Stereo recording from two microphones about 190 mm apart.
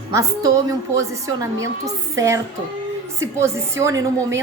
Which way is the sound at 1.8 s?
15° right (ahead or behind).